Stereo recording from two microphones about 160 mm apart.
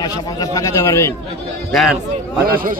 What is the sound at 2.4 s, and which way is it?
Speech, 60° right (ahead or behind).